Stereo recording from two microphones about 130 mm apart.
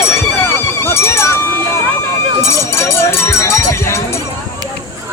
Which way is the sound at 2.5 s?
20° left (ahead or behind).